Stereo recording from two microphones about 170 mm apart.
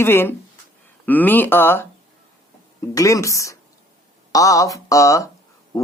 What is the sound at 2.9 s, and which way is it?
Speech, 20° left (ahead or behind).